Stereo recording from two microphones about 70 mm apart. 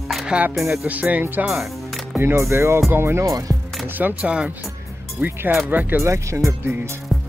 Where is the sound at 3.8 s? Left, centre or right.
Right.